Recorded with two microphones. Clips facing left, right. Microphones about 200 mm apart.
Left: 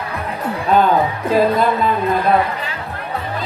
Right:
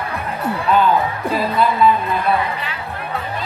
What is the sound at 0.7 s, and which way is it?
A woman's voice, 45° left (ahead or behind).